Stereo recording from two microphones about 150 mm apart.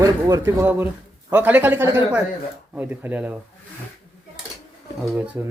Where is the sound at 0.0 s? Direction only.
20° right (ahead or behind).